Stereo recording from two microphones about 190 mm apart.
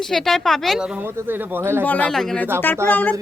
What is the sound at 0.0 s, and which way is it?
Speech, centre (ahead or behind).